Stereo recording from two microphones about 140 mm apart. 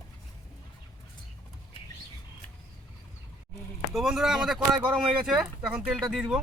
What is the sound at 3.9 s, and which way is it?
Speech, centre (ahead or behind).